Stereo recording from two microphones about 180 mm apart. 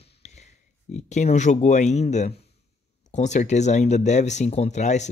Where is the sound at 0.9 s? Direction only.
40° left (ahead or behind).